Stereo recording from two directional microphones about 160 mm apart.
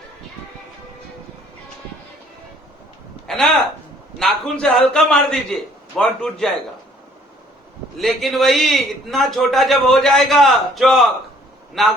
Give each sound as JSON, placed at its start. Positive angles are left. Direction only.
{"t": 3.2, "sound": "a sound", "side_deg": 0}
{"t": 4.2, "sound": "a man's voice", "side_deg": 5}
{"t": 7.9, "sound": "a man's voice", "side_deg": 0}